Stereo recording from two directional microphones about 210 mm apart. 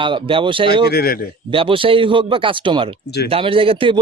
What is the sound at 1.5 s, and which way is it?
Speech, 25° right (ahead or behind).